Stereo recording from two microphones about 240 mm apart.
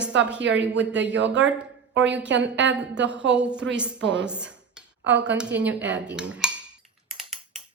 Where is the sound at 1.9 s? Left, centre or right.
Right.